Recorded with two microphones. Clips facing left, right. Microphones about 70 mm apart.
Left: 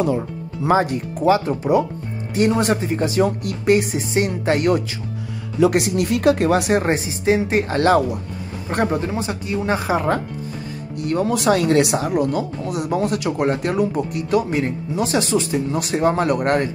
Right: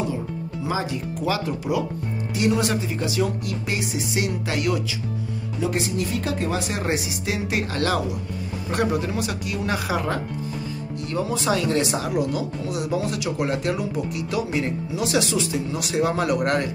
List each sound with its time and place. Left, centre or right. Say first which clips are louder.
0.7 s speech: left 9 dB; left
1.2 s speech: left 9 dB; left
5.6 s speech: left 8 dB; left
6.8 s speech: left 4 dB; left
11.0 s speech: left 7 dB; left